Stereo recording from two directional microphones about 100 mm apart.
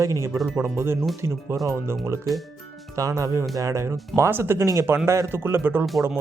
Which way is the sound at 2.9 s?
35° right (ahead or behind).